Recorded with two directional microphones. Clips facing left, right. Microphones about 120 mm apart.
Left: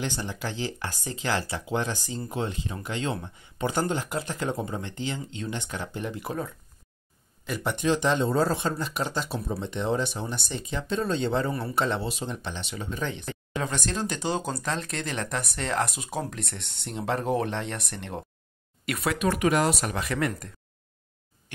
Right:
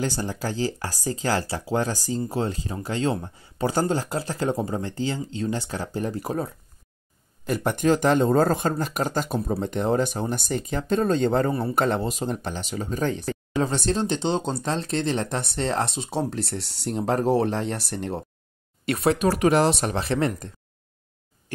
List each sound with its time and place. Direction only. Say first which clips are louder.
0.0 s speech: right 5 dB; 40° right (ahead or behind)